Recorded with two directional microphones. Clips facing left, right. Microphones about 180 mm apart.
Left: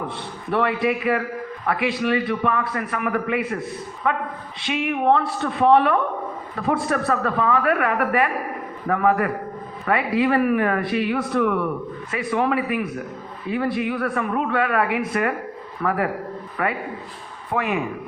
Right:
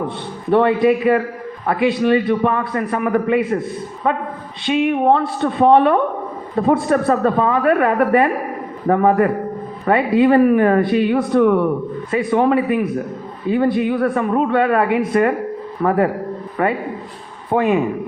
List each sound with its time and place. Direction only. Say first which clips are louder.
0.5 s a man's voice: right 8 dB; 30° right (ahead or behind)